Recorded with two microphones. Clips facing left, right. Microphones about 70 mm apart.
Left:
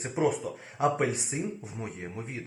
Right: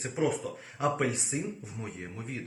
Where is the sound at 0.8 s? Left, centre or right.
Centre.